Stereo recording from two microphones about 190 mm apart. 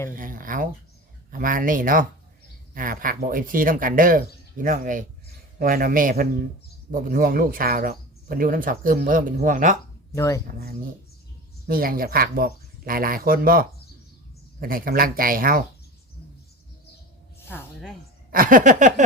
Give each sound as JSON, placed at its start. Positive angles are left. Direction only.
{"t": 0.2, "sound": "speech", "side_deg": -45}
{"t": 10.2, "sound": "speech", "side_deg": 15}
{"t": 10.4, "sound": "speech", "side_deg": -50}
{"t": 17.4, "sound": "a sound", "side_deg": 10}
{"t": 18.3, "sound": "speech", "side_deg": -45}